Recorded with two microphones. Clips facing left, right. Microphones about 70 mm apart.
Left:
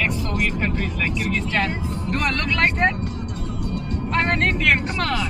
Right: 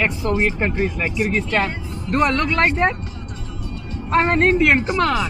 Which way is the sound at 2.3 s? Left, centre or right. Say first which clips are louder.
Right 3 dB; right.